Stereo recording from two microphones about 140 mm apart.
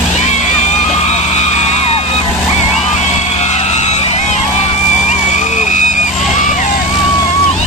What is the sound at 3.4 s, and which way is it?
Vehicle, 55° left (ahead or behind).